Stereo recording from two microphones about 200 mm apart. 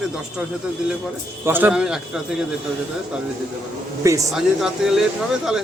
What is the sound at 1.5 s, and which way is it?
Speech, 10° right (ahead or behind).